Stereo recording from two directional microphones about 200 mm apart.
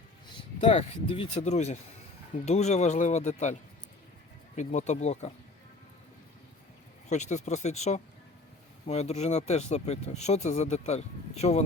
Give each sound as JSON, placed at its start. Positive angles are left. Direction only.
{"t": 0.6, "sound": "speech", "side_deg": 30}
{"t": 7.1, "sound": "speech", "side_deg": 35}